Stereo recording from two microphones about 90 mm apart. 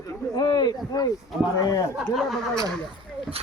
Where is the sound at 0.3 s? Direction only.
55° left (ahead or behind).